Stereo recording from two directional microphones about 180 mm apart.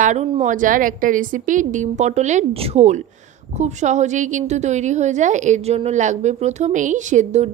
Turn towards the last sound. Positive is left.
turn(degrees=-40)  # may be behind; listen again after turning